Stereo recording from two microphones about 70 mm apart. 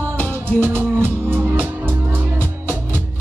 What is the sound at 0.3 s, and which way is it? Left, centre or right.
Music, right.